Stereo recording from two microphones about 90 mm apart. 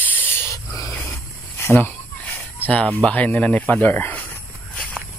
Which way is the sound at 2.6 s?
15° left (ahead or behind).